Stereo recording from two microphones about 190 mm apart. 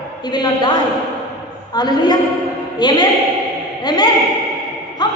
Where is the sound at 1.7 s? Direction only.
20° left (ahead or behind).